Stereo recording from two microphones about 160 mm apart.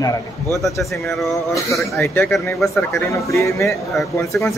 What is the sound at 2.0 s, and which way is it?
A man's voice, 15° left (ahead or behind).